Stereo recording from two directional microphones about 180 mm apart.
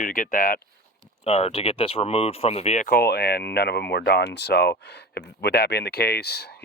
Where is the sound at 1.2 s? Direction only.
35° left (ahead or behind).